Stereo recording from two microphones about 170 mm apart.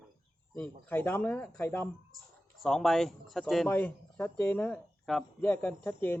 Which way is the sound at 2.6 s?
Centre (ahead or behind).